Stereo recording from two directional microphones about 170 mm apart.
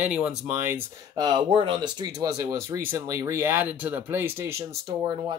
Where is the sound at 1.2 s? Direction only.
25° right (ahead or behind).